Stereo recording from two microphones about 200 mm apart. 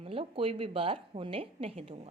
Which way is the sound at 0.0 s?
25° right (ahead or behind).